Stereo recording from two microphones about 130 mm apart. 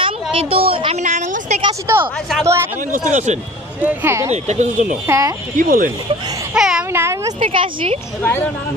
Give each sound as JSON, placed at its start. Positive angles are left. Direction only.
{"t": 0.0, "sound": "a sound", "side_deg": -45}
{"t": 1.0, "sound": "a sound", "side_deg": -65}
{"t": 2.4, "sound": "speech", "side_deg": -20}
{"t": 3.1, "sound": "speech", "side_deg": -65}
{"t": 3.8, "sound": "speech", "side_deg": -20}
{"t": 4.3, "sound": "speech", "side_deg": -65}
{"t": 5.0, "sound": "speech", "side_deg": -20}
{"t": 5.6, "sound": "speech", "side_deg": -90}
{"t": 6.5, "sound": "babbling", "side_deg": -5}
{"t": 6.9, "sound": "a sound", "side_deg": -20}
{"t": 7.3, "sound": "speech", "side_deg": -45}
{"t": 8.2, "sound": "speech", "side_deg": 15}